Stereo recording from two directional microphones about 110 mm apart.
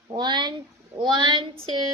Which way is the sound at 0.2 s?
40° right (ahead or behind).